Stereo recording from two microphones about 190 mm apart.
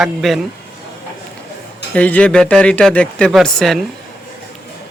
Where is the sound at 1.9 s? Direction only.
5° left (ahead or behind).